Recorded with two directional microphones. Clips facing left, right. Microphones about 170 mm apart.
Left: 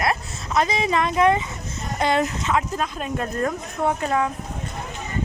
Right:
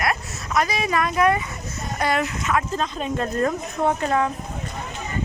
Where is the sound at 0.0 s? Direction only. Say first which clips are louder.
Left 1 dB; 25° left (ahead or behind).